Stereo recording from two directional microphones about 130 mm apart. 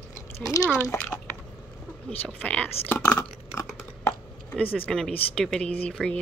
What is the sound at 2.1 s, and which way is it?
Speech, 10° left (ahead or behind).